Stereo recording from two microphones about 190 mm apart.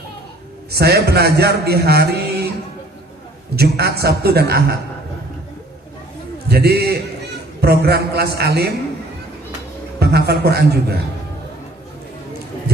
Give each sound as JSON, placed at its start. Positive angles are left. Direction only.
{"t": 0.7, "sound": "a man's voice", "side_deg": -55}
{"t": 3.5, "sound": "a man's voice", "side_deg": -55}
{"t": 6.5, "sound": "a man's voice", "side_deg": -55}
{"t": 10.0, "sound": "a man's voice", "side_deg": -60}